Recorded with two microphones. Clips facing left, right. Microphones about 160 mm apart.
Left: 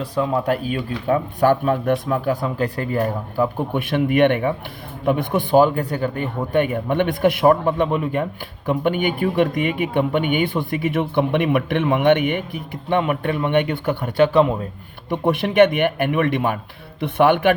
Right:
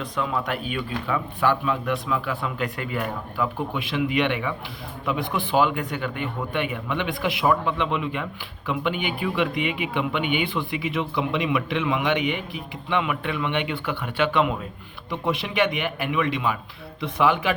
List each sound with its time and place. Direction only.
0.0 s speech: 35° left (ahead or behind)
3.8 s speech: 50° left (ahead or behind)
15.1 s speech: 55° left (ahead or behind)